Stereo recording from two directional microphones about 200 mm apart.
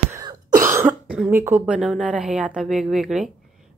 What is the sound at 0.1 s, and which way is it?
Cough, 20° right (ahead or behind).